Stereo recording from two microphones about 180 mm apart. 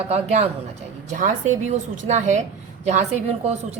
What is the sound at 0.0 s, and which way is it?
A woman's voice, 35° right (ahead or behind).